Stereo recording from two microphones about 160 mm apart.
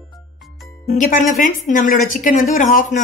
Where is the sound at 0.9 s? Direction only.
50° left (ahead or behind).